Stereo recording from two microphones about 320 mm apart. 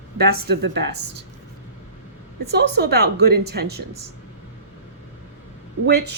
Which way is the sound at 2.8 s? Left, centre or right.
Right.